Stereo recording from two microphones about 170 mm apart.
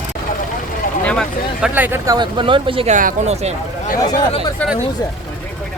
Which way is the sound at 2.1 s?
30° right (ahead or behind).